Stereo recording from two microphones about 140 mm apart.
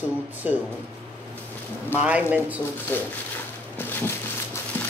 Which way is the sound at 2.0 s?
10° right (ahead or behind).